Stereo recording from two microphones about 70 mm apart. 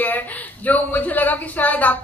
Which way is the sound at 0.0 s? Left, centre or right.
Left.